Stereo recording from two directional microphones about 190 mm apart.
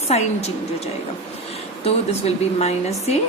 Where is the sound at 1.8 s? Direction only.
35° left (ahead or behind).